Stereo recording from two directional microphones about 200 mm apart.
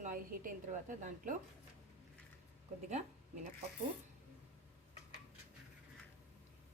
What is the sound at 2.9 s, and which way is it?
Speech, 35° right (ahead or behind).